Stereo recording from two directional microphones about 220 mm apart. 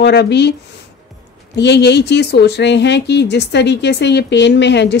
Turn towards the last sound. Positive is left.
turn(degrees=50)  # may be behind; listen again after turning